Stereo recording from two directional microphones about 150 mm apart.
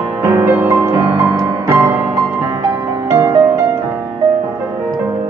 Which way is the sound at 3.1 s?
20° right (ahead or behind).